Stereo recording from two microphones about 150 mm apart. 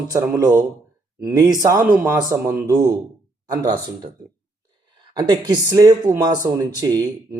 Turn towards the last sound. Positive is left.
turn(degrees=-25)  # may be behind; listen again after turning